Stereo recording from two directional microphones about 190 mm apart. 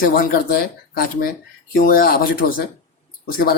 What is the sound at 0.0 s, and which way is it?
Speech, 50° left (ahead or behind).